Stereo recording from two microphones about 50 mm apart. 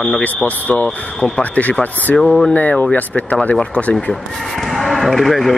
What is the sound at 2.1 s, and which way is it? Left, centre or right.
Speech, left.